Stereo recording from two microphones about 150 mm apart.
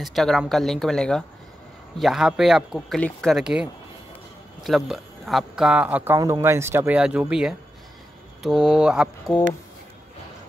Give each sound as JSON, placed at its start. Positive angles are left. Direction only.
{"t": 0.0, "sound": "speech", "side_deg": 0}
{"t": 4.6, "sound": "speech", "side_deg": 0}
{"t": 6.1, "sound": "speech", "side_deg": -20}